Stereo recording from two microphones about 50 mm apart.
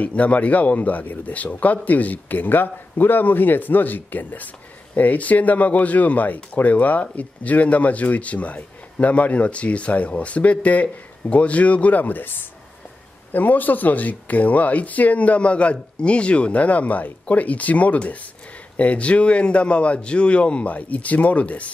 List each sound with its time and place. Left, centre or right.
0.0 s speech: left